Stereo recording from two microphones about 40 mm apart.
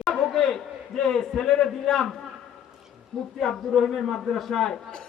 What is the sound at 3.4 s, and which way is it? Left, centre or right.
A man's voice, centre.